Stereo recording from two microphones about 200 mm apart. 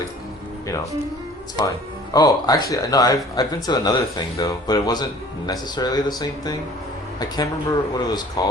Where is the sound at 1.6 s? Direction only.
20° left (ahead or behind).